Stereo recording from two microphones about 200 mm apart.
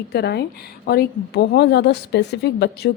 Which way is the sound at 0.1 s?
55° left (ahead or behind).